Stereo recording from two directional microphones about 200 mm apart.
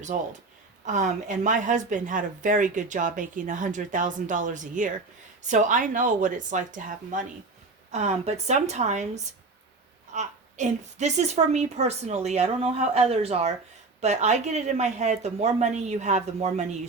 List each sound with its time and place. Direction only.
0.1 s a woman's voice: 40° right (ahead or behind)